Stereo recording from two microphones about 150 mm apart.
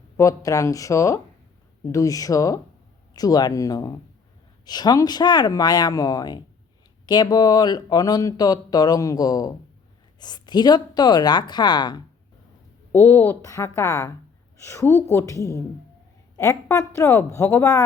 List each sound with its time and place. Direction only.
0.2 s speech: 20° left (ahead or behind)
12.9 s speech: 15° left (ahead or behind)